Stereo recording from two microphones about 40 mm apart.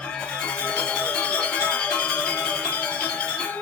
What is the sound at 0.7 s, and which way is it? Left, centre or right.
Music, left.